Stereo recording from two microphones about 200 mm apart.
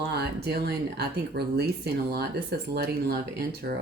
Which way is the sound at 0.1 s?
55° right (ahead or behind).